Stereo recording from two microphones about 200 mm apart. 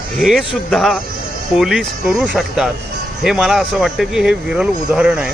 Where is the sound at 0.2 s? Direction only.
Centre (ahead or behind).